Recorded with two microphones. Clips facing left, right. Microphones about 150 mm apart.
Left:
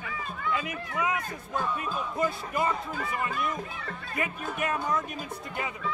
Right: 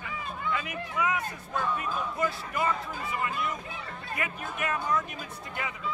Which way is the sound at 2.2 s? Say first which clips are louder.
Left 2 dB; 25° left (ahead or behind).